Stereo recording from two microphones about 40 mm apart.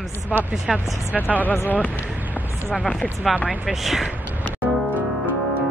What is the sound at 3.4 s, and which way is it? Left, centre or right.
Speech, centre.